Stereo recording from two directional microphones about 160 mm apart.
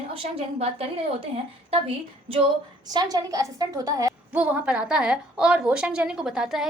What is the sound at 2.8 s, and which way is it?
A woman's voice, 25° right (ahead or behind).